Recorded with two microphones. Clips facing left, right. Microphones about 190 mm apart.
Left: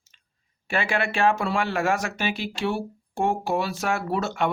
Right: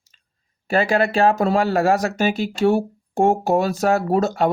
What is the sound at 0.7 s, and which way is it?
Speech, 40° right (ahead or behind).